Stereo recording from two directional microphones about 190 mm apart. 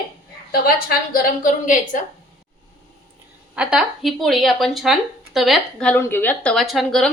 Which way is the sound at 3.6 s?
Centre (ahead or behind).